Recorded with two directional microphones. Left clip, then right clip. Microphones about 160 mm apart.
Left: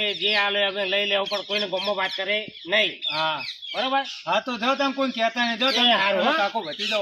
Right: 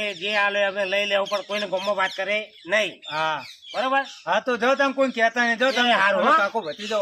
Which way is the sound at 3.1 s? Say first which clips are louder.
Even; 20° right (ahead or behind).